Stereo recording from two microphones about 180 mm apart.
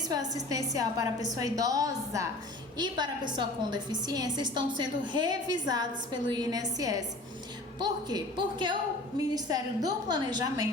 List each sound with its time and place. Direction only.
0.0 s a woman's voice: 20° right (ahead or behind)